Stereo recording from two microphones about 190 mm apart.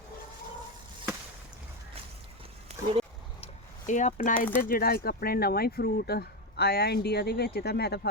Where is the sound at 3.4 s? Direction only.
40° left (ahead or behind).